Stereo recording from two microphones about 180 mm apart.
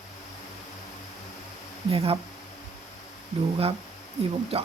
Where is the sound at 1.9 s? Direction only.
30° right (ahead or behind).